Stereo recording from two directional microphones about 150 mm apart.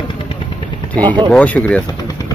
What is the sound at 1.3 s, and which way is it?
Speech, 10° left (ahead or behind).